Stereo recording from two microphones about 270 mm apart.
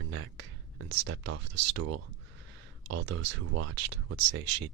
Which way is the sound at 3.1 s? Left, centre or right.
Right.